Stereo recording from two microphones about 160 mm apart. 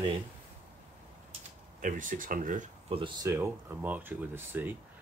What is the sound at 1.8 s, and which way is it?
Speech, 55° right (ahead or behind).